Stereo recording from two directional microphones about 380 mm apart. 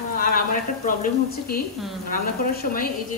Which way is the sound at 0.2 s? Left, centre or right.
Left.